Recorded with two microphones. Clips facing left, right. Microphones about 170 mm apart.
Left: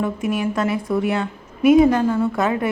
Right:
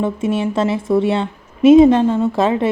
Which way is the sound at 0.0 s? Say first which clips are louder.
Right 3 dB; 25° right (ahead or behind).